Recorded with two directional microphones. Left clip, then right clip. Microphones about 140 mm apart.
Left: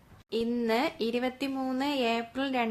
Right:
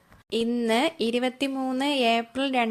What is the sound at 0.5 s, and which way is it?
A woman's voice, 40° right (ahead or behind).